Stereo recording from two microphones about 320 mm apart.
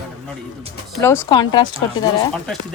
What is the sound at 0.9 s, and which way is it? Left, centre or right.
Speech, centre.